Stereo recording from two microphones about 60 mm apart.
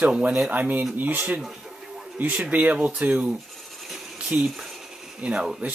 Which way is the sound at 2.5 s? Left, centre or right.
Right.